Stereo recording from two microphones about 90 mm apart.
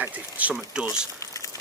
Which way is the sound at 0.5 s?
5° right (ahead or behind).